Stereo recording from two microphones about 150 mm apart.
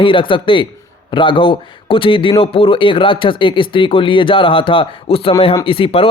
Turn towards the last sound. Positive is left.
turn(degrees=35)  # may be behind; listen again after turning